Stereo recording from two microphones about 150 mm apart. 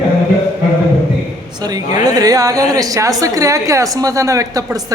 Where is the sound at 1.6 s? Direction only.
25° right (ahead or behind).